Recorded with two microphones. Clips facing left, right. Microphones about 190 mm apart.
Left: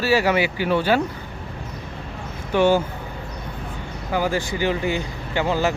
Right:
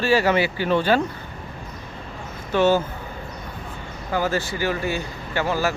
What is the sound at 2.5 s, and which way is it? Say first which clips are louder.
Speech: left 1 dB; 15° left (ahead or behind).